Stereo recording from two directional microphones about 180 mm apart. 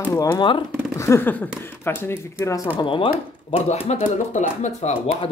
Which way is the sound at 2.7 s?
30° left (ahead or behind).